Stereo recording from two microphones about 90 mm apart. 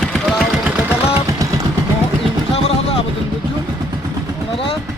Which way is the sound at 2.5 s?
90° left.